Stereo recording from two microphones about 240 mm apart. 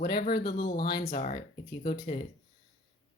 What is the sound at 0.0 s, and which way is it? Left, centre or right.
A woman's voice, left.